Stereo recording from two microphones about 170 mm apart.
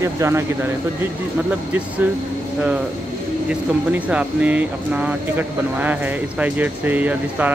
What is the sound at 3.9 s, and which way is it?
Speech, 10° right (ahead or behind).